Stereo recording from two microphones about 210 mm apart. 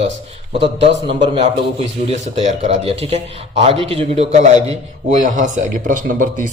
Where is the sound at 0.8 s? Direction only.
25° right (ahead or behind).